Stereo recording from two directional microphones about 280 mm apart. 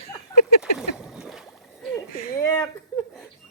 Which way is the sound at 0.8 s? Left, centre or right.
Centre.